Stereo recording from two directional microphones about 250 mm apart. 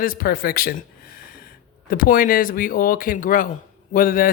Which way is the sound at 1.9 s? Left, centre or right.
Left.